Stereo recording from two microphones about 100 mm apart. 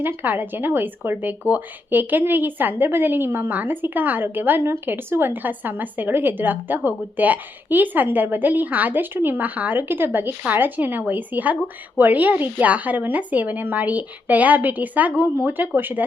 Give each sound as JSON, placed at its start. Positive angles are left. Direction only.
{"t": 0.0, "sound": "speech", "side_deg": -20}